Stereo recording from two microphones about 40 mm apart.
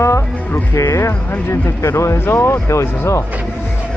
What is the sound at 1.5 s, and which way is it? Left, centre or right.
Speech, left.